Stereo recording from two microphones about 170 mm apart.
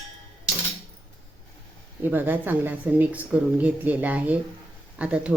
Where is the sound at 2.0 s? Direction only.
10° right (ahead or behind).